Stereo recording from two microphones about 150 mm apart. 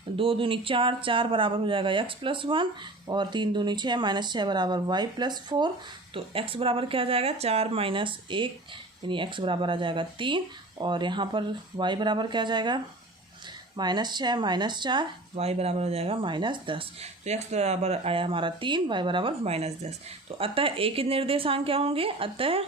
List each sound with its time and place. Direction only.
0.2 s speech: 35° right (ahead or behind)